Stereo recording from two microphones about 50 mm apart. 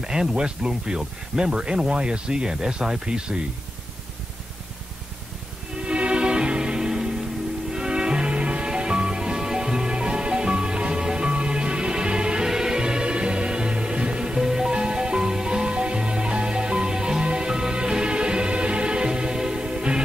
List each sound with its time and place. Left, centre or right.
0.0 s speech: centre
5.8 s music: right